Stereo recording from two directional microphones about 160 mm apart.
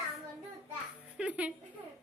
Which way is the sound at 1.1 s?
10° right (ahead or behind).